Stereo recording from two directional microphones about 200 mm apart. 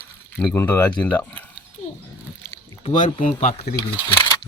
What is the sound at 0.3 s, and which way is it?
Speech, 10° left (ahead or behind).